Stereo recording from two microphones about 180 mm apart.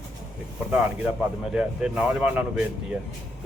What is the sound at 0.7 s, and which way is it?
Speech, 5° right (ahead or behind).